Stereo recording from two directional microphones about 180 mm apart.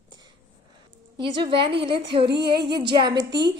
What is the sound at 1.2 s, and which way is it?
A woman's voice, 25° right (ahead or behind).